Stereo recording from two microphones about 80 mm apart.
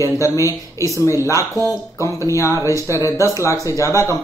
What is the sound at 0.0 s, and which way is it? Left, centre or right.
Speech, left.